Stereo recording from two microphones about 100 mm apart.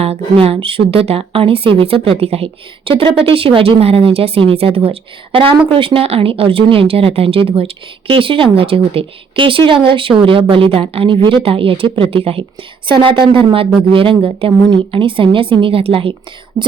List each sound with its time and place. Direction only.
0.0 s a woman's voice: 80° right
12.9 s a woman's voice: 60° right (ahead or behind)
16.6 s cough: 35° right (ahead or behind)